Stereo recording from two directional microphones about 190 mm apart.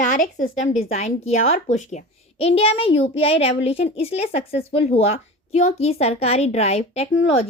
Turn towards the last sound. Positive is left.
turn(degrees=30)  # may be behind; listen again after turning